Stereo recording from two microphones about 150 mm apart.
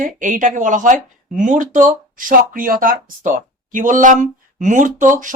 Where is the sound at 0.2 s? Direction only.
60° right (ahead or behind).